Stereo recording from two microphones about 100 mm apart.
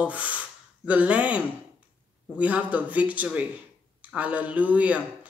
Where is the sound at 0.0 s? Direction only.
15° right (ahead or behind).